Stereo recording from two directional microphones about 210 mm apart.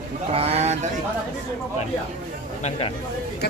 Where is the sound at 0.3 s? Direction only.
30° right (ahead or behind).